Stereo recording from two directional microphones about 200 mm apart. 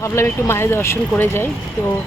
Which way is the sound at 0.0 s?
15° left (ahead or behind).